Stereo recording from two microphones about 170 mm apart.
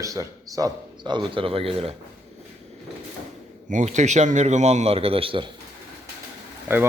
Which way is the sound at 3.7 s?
45° right (ahead or behind).